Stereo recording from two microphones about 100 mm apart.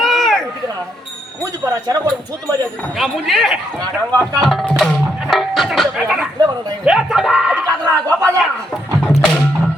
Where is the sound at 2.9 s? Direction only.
Centre (ahead or behind).